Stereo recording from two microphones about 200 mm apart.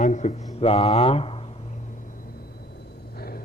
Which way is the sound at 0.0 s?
35° left (ahead or behind).